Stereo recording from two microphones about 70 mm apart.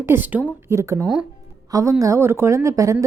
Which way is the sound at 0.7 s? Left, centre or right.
Right.